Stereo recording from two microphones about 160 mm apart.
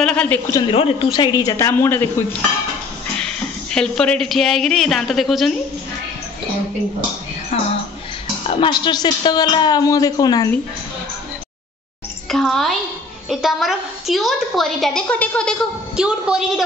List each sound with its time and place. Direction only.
0.0 s a sound: 5° left (ahead or behind)
0.5 s a man's voice: 30° left (ahead or behind); by 5.6 s centre (ahead or behind)
7.5 s a woman's voice: 40° left (ahead or behind); by 10.5 s 25° left (ahead or behind)
12.3 s a child's voice: centre (ahead or behind)
16.0 s a woman's voice: 5° right (ahead or behind)